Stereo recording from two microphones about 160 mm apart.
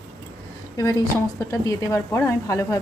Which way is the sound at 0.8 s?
20° left (ahead or behind).